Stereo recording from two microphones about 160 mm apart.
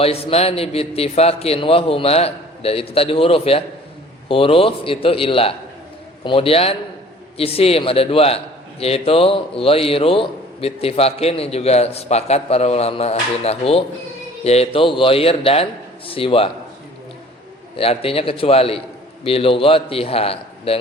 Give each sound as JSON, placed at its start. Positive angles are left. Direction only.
{"t": 0.0, "sound": "a man's voice", "side_deg": 40}
{"t": 17.7, "sound": "a man's voice", "side_deg": 35}